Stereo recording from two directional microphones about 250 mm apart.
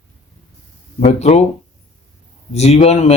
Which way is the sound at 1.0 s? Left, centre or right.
Left.